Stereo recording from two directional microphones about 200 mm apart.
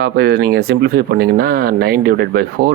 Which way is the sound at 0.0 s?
55° right (ahead or behind).